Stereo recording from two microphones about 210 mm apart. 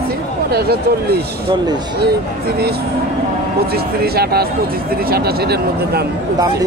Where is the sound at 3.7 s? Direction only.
50° right (ahead or behind).